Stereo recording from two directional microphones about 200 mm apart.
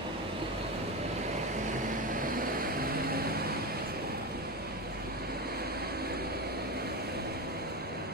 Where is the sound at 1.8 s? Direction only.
40° right (ahead or behind).